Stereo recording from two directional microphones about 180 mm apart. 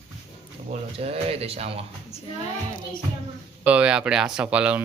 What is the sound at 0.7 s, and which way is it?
Speech, 35° right (ahead or behind).